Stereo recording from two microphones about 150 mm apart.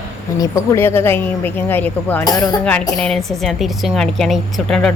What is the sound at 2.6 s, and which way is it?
Speech, 5° left (ahead or behind).